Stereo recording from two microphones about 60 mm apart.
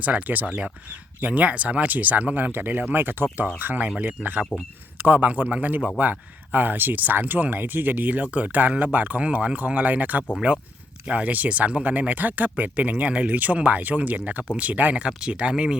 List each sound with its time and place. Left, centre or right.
0.0 s speech: right
3.8 s speech: centre
4.2 s speech: right